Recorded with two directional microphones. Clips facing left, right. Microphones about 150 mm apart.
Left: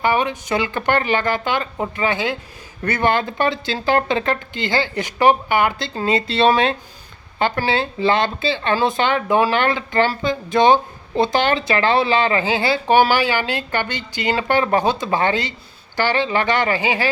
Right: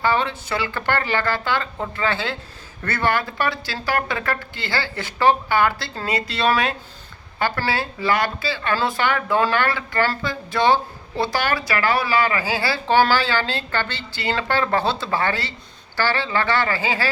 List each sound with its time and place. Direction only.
0.0 s speech: 15° left (ahead or behind)